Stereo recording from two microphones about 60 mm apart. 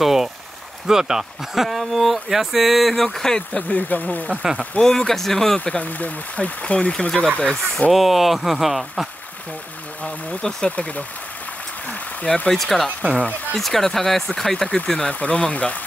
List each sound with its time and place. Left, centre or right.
0.0 s rain on surface: centre
0.8 s speech: centre
3.6 s speech: left
4.7 s speech: centre
5.6 s speech: left
7.9 s speech: centre
10.4 s speech: centre
12.4 s speech: centre
13.1 s speech: left
13.6 s speech: centre; by 15.8 s left